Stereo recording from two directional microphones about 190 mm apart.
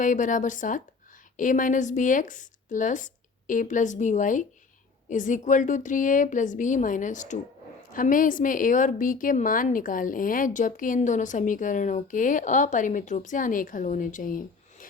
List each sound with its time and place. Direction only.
0.0 s a woman's voice: 40° left (ahead or behind)